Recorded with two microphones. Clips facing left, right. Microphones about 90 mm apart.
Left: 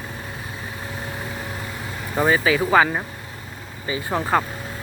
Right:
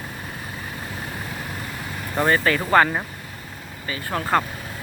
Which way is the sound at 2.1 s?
5° left (ahead or behind).